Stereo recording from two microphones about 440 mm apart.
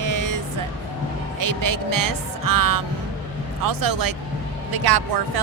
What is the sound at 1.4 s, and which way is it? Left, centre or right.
Speech, right.